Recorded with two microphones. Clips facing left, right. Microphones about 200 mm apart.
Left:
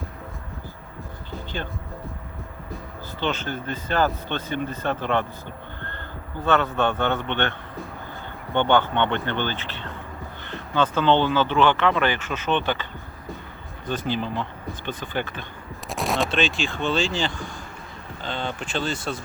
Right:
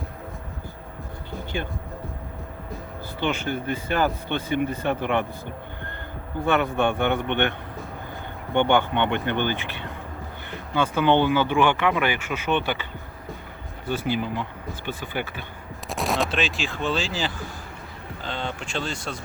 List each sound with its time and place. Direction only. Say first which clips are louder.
3.2 s speech: right 1 dB; 15° right (ahead or behind)
6.4 s speech: even; 15° right (ahead or behind)
8.5 s speech: even; 15° right (ahead or behind)
15.9 s speech: even; centre (ahead or behind)